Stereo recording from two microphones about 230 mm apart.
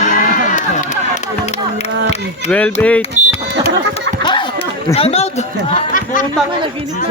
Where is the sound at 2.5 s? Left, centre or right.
Centre.